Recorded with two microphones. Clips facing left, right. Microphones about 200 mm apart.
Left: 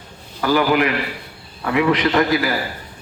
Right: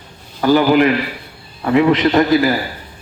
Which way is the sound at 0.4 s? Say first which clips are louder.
Right 5 dB; 30° right (ahead or behind).